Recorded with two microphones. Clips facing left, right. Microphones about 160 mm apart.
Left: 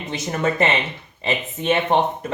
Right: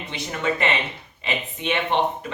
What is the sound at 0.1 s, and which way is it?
Speech, 40° left (ahead or behind).